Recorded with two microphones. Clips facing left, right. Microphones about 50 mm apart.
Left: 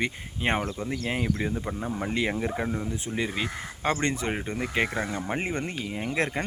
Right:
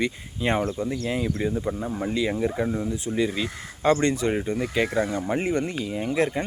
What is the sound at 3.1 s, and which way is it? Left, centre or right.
Speech, left.